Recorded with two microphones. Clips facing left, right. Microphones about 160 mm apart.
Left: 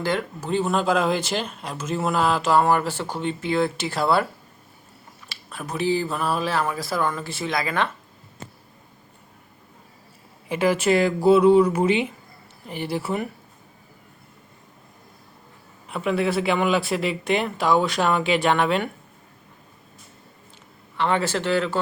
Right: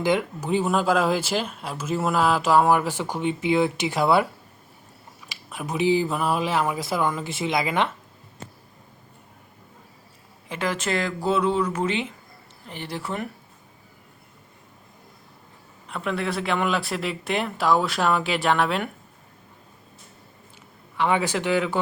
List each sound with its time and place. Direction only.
0.0 s speech: 15° right (ahead or behind)
5.3 s speech: 15° right (ahead or behind)
10.5 s speech: 10° left (ahead or behind)
15.9 s speech: 5° left (ahead or behind)
20.9 s speech: 10° right (ahead or behind)